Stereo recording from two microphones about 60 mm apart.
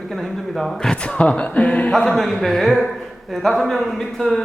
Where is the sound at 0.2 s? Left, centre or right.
Centre.